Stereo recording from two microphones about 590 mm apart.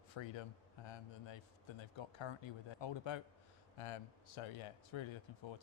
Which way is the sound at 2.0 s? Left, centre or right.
Left.